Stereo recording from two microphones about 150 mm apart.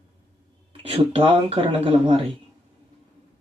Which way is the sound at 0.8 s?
40° right (ahead or behind).